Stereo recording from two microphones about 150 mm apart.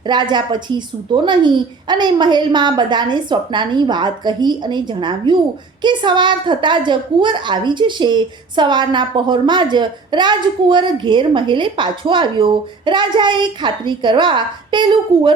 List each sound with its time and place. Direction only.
0.0 s a woman's voice: 30° right (ahead or behind)